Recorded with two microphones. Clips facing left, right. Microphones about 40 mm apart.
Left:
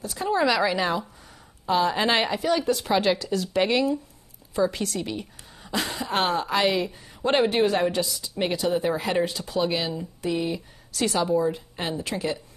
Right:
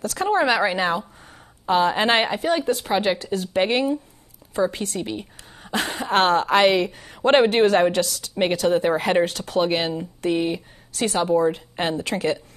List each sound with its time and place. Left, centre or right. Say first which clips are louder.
0.3 s a woman's voice: right 2 dB; right
2.8 s speech: right 1 dB; right
3.2 s a woman's voice: right 2 dB; right
5.7 s speech: right 4 dB; right